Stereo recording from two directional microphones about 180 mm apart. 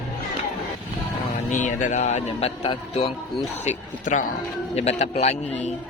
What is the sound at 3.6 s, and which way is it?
A man's voice, 45° left (ahead or behind).